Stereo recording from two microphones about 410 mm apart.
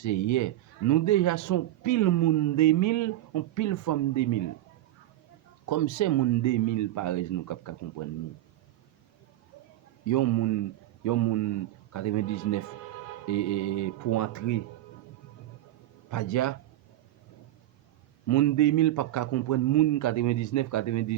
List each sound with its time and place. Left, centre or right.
0.0 s speech: left
5.6 s speech: left
10.1 s a man's voice: left
16.0 s speech: left
18.3 s a man's voice: left